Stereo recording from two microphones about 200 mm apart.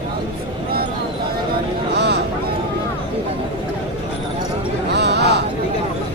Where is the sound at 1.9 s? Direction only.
55° right (ahead or behind).